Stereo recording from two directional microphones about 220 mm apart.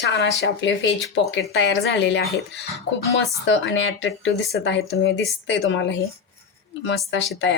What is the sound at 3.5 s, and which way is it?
Speech, 55° left (ahead or behind).